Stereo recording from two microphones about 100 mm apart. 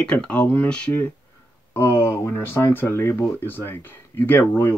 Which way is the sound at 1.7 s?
25° left (ahead or behind).